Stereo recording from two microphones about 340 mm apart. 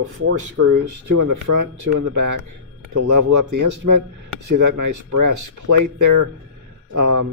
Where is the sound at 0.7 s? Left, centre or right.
Right.